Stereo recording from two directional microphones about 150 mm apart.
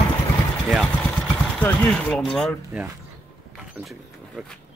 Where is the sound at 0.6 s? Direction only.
Centre (ahead or behind).